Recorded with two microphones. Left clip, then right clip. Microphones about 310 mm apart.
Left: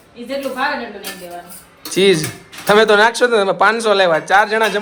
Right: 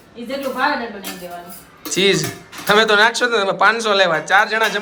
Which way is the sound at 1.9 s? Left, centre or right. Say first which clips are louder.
Left 3 dB; centre.